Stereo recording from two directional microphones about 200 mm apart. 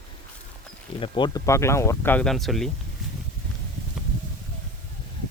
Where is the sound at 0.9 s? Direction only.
25° left (ahead or behind); by 2.6 s centre (ahead or behind).